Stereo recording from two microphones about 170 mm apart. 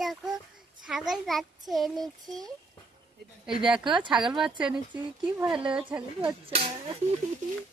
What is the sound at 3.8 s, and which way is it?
Speech, 30° right (ahead or behind).